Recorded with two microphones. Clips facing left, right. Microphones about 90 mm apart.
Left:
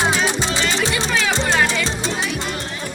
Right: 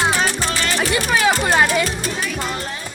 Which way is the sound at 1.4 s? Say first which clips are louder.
Right 2 dB; 15° right (ahead or behind).